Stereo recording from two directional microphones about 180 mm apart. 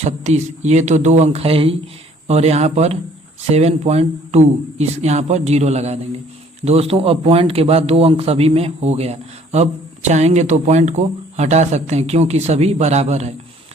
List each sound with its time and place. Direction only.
0.0 s speech: 40° right (ahead or behind)